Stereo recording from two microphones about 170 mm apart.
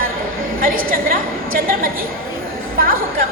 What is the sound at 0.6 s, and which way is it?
A woman's voice, 55° right (ahead or behind).